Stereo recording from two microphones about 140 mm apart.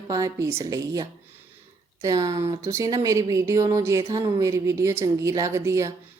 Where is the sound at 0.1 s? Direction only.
20° right (ahead or behind).